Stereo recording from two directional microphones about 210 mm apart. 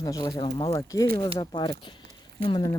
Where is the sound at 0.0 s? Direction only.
15° left (ahead or behind).